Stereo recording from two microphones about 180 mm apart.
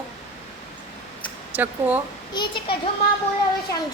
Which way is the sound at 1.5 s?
10° right (ahead or behind).